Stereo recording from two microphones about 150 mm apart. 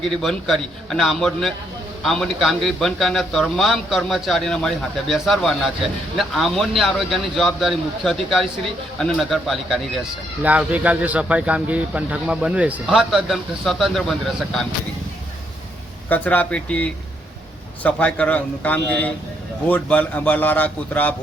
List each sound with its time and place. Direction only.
0.0 s a man's voice: centre (ahead or behind)
16.0 s a man's voice: 10° left (ahead or behind)